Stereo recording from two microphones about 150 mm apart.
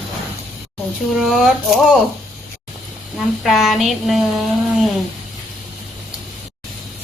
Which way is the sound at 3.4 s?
Centre (ahead or behind).